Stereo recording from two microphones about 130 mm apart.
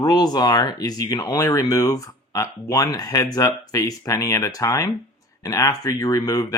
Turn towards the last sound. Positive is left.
turn(degrees=25)  # may be behind; listen again after turning